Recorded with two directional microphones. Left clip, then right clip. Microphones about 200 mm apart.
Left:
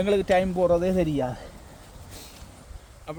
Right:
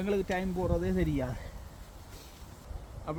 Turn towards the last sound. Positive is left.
turn(degrees=55)  # may be behind; listen again after turning